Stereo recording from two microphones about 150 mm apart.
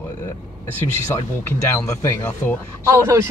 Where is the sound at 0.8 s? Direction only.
20° left (ahead or behind).